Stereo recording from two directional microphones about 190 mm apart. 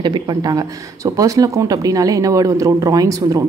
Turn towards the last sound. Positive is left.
turn(degrees=-20)  # may be behind; listen again after turning